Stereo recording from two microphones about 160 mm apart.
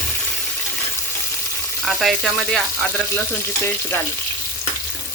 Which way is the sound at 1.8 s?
Centre (ahead or behind).